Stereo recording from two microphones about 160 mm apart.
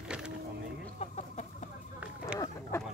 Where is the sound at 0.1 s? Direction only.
5° right (ahead or behind).